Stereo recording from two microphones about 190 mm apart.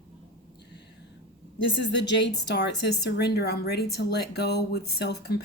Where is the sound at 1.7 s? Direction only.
65° left (ahead or behind).